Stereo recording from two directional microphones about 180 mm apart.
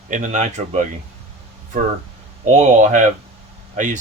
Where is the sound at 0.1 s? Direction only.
40° right (ahead or behind).